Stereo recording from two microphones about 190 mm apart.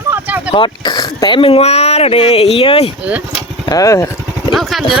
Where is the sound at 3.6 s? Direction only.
20° left (ahead or behind).